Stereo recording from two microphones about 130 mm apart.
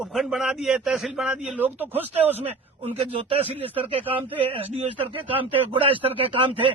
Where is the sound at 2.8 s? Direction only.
50° right (ahead or behind).